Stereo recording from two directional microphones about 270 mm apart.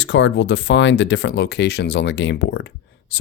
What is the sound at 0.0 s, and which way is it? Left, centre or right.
Speech, left.